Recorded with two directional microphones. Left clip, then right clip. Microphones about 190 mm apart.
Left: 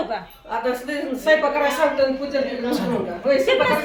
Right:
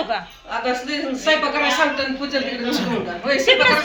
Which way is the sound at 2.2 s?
20° left (ahead or behind).